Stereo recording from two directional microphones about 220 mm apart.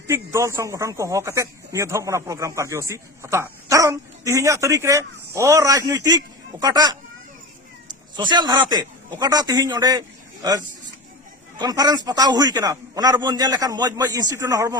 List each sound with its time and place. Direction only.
0.1 s speech: 15° right (ahead or behind)
8.1 s a man's voice: 20° right (ahead or behind)
11.6 s speech: 15° right (ahead or behind)